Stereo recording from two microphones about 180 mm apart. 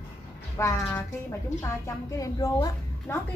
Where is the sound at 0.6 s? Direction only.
15° left (ahead or behind).